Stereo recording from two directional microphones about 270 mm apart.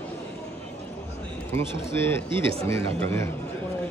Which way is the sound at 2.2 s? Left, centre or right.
Centre.